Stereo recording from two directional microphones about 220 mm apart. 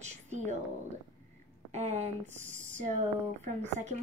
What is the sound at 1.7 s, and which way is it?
A woman's voice, 30° right (ahead or behind).